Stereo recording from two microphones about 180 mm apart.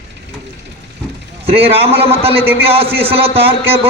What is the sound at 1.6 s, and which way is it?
A man's voice, 30° right (ahead or behind).